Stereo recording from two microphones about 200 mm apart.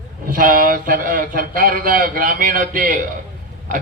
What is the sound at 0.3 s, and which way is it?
Speech, 45° right (ahead or behind).